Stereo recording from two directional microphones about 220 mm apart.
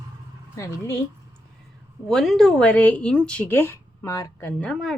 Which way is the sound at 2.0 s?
Centre (ahead or behind).